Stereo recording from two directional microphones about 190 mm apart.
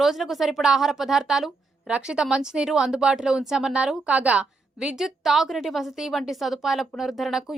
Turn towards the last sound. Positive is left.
turn(degrees=0)  # may be behind; listen again after turning